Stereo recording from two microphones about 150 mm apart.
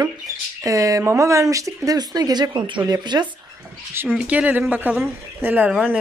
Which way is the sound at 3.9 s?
15° right (ahead or behind).